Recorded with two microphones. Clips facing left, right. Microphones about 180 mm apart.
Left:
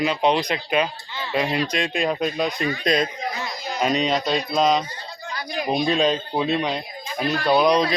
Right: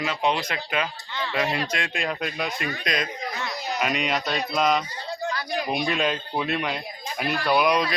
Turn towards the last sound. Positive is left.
turn(degrees=25)  # may be behind; listen again after turning